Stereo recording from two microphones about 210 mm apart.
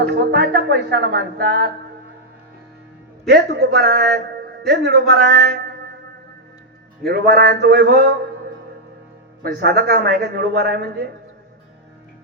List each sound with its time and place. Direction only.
0.0 s a man's voice: 50° right (ahead or behind)
3.2 s a man's voice: 50° right (ahead or behind)
7.0 s a man's voice: 50° right (ahead or behind)
9.4 s a man's voice: 45° right (ahead or behind)